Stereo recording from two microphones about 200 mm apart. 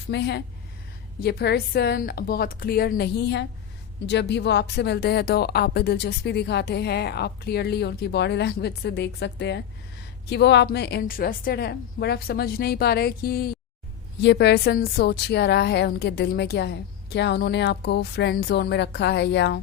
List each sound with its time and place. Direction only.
0.1 s a woman's voice: 55° left (ahead or behind)